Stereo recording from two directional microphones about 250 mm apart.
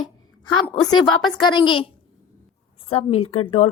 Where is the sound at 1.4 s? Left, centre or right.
Centre.